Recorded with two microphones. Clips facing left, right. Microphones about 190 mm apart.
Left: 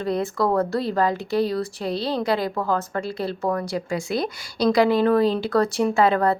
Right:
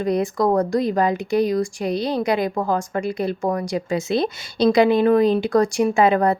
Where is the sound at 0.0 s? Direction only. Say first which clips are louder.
Right 3 dB; 15° right (ahead or behind).